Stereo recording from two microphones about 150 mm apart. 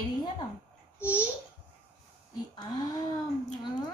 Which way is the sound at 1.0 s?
10° right (ahead or behind).